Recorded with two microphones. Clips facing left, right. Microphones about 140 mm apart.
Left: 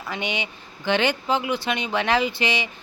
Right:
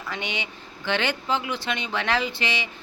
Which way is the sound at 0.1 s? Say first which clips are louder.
Left 4 dB; 15° left (ahead or behind).